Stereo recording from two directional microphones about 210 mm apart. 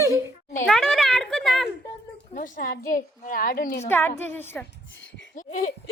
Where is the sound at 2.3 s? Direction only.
40° left (ahead or behind).